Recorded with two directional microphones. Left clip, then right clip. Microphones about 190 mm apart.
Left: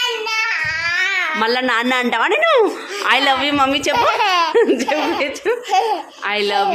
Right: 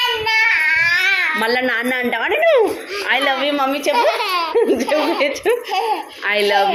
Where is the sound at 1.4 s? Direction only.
20° left (ahead or behind).